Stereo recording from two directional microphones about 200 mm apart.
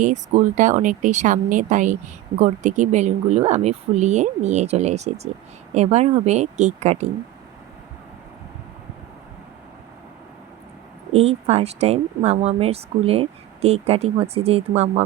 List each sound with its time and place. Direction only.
0.0 s speech: 40° right (ahead or behind)
11.1 s speech: 30° right (ahead or behind)